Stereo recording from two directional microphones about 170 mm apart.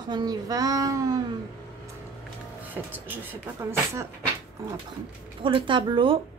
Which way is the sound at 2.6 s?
10° right (ahead or behind).